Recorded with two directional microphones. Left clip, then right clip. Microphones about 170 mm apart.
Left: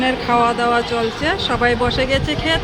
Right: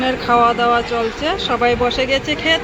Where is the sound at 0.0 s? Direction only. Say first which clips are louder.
Right 2 dB; 10° left (ahead or behind).